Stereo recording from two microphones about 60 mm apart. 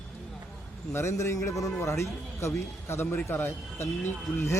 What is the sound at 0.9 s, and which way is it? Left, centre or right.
A man's voice, left.